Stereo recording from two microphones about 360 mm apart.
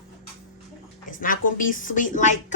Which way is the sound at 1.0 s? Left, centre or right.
Left.